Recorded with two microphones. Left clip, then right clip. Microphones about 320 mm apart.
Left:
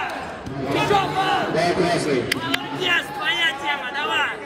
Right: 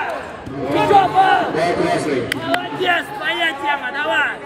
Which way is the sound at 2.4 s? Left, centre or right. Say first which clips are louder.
Right 4 dB; right.